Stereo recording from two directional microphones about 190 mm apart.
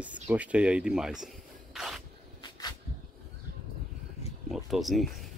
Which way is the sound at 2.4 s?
20° left (ahead or behind).